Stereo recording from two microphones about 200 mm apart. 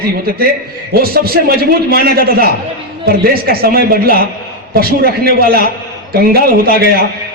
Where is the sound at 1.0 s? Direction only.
50° right (ahead or behind).